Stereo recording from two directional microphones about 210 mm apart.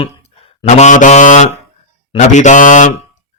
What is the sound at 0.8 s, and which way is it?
Mantra, 35° left (ahead or behind).